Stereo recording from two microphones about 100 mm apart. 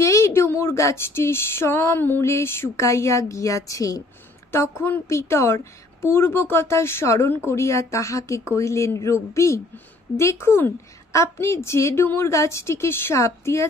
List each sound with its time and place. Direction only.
0.0 s speech: 30° left (ahead or behind)